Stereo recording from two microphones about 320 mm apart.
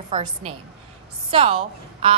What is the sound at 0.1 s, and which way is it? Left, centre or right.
A woman's voice, centre.